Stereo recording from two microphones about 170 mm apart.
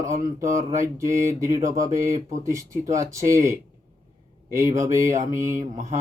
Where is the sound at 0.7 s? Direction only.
15° right (ahead or behind).